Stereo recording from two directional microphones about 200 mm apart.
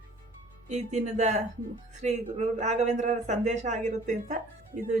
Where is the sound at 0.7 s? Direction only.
35° right (ahead or behind).